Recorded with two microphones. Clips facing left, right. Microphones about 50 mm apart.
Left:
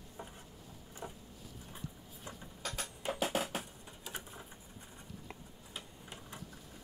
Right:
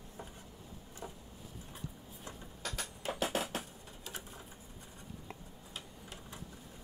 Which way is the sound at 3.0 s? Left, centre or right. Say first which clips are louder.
Left 1 dB; centre.